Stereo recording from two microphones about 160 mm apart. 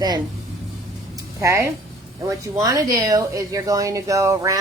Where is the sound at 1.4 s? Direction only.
20° right (ahead or behind).